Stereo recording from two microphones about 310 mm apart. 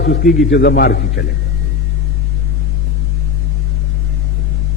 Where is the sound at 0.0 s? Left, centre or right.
Left.